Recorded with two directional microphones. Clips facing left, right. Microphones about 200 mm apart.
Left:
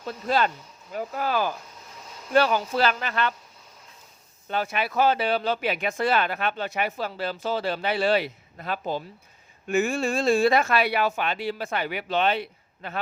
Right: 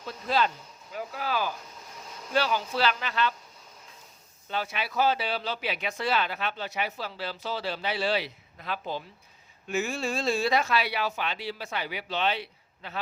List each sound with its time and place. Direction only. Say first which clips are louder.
0.3 s speech: left 3 dB; 50° left (ahead or behind)
4.4 s speech: left 5 dB; 50° left (ahead or behind)